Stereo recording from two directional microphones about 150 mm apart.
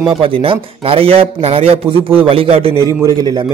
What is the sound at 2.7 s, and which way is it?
Speech, 25° left (ahead or behind).